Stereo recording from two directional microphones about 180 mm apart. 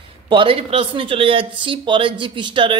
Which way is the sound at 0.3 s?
30° right (ahead or behind).